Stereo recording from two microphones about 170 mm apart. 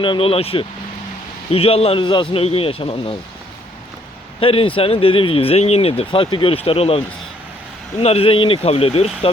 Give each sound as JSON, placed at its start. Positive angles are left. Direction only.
{"t": 0.0, "sound": "speech", "side_deg": 30}
{"t": 4.4, "sound": "speech", "side_deg": 30}